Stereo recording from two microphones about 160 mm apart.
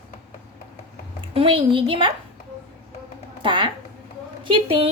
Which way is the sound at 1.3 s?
35° right (ahead or behind).